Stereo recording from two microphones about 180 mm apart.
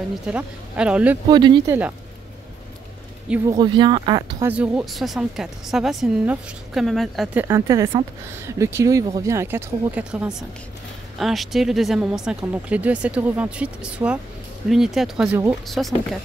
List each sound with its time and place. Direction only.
0.3 s speech: 5° right (ahead or behind)
1.3 s speech: 25° right (ahead or behind)
1.7 s speech: 10° right (ahead or behind)
3.4 s speech: 25° right (ahead or behind)
4.5 s speech: 5° right (ahead or behind)
7.4 s speech: 15° right (ahead or behind); by 16.2 s centre (ahead or behind)